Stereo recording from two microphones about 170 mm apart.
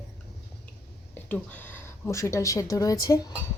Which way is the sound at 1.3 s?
10° left (ahead or behind).